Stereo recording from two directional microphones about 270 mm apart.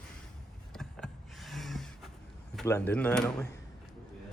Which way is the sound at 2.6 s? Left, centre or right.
Centre.